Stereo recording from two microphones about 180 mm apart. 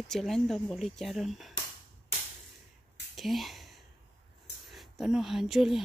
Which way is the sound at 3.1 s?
Centre (ahead or behind).